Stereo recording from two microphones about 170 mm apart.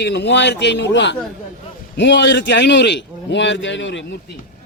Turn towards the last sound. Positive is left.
turn(degrees=90)